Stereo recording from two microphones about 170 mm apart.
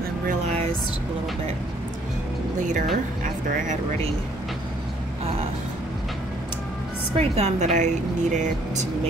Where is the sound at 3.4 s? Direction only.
45° right (ahead or behind).